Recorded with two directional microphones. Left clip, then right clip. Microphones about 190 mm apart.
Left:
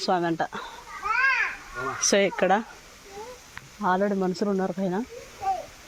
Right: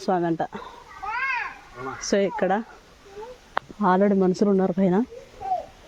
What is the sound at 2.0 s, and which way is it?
Speech, 25° right (ahead or behind).